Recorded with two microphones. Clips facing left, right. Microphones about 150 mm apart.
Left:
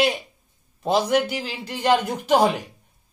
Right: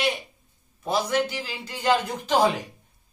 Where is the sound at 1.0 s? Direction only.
60° left (ahead or behind).